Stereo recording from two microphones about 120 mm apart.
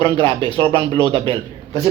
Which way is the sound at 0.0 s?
50° right (ahead or behind).